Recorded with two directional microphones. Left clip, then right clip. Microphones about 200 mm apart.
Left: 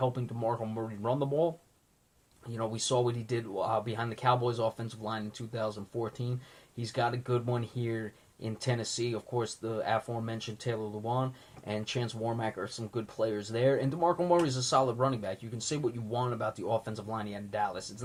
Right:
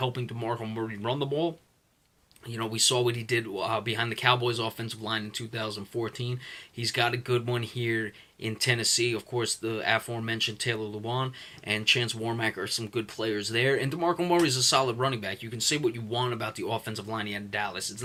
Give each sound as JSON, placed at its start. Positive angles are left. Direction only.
{"t": 0.0, "sound": "speech", "side_deg": -15}